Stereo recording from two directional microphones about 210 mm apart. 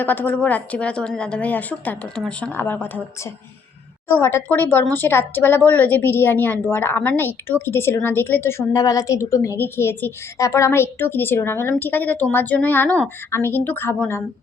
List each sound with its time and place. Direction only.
0.0 s speech: 10° left (ahead or behind)
4.1 s speech: 10° left (ahead or behind)